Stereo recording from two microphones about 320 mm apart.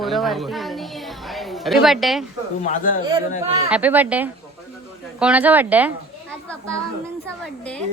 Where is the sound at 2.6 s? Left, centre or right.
Left.